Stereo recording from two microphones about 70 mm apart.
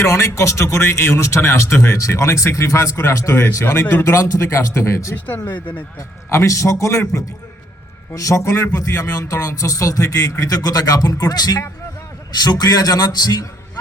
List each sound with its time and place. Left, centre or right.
0.0 s speech: left
5.5 s speech: left
6.3 s a man's voice: left
8.1 s speech: left